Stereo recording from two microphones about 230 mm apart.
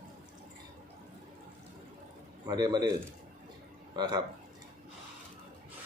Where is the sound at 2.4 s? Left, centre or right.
Centre.